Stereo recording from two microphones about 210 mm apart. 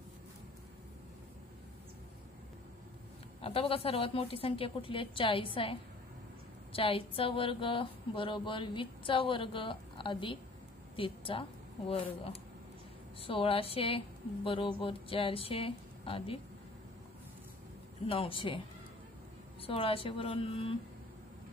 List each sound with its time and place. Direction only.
3.4 s speech: 25° left (ahead or behind)
13.2 s speech: 25° left (ahead or behind)
18.0 s speech: 25° left (ahead or behind)
19.6 s speech: 25° left (ahead or behind)